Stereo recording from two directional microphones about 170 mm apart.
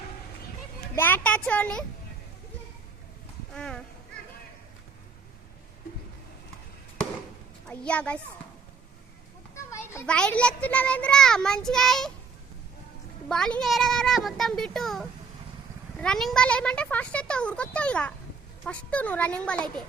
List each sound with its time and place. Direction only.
0.9 s speech: 10° left (ahead or behind)
3.5 s a child's voice: 5° left (ahead or behind)
7.7 s speech: 5° left (ahead or behind)
9.7 s children playing: 15° left (ahead or behind)
10.1 s a child's voice: 5° left (ahead or behind)
13.2 s a child's voice: 5° left (ahead or behind)